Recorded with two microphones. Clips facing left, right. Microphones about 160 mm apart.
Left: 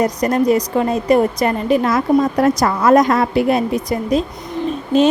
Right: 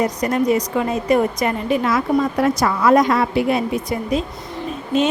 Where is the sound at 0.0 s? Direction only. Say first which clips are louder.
Left 3 dB; 40° left (ahead or behind).